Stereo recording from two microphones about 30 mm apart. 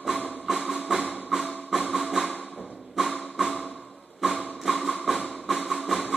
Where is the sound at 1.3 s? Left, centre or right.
Right.